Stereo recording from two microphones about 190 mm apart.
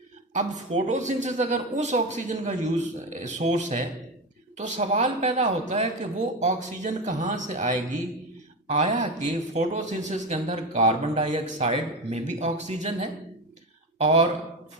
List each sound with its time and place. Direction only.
0.3 s speech: 35° right (ahead or behind)